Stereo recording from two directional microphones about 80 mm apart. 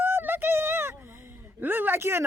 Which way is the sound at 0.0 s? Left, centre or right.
Right.